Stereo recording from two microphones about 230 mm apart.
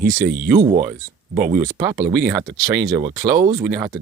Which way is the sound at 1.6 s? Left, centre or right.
Centre.